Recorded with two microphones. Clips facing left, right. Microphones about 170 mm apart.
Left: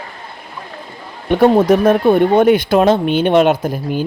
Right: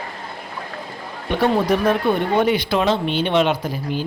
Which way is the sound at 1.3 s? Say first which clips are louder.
Left 7 dB; 50° left (ahead or behind).